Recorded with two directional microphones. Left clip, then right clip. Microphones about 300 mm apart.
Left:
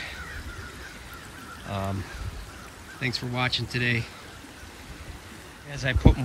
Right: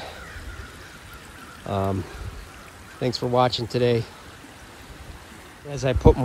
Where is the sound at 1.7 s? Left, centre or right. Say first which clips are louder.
Right 7 dB; left.